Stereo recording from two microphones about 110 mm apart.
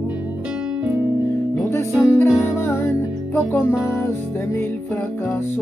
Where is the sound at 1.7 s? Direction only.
25° left (ahead or behind).